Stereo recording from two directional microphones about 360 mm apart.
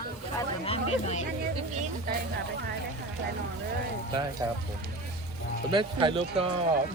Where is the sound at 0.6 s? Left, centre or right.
Centre.